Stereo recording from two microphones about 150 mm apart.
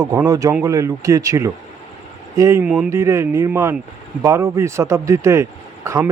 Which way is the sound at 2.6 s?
10° right (ahead or behind).